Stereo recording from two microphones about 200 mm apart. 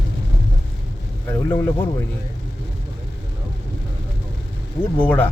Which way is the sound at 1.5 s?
10° left (ahead or behind).